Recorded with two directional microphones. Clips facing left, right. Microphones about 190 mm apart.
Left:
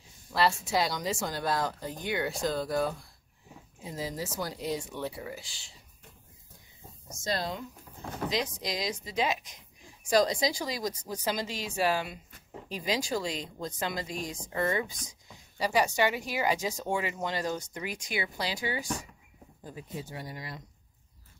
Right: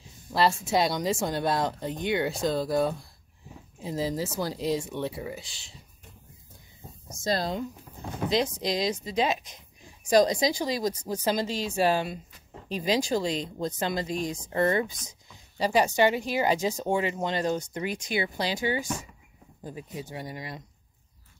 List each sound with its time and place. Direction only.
0.3 s speech: 25° right (ahead or behind)
7.2 s speech: 35° right (ahead or behind); by 20.6 s 20° right (ahead or behind)